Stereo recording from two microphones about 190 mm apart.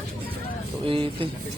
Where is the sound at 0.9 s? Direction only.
30° right (ahead or behind).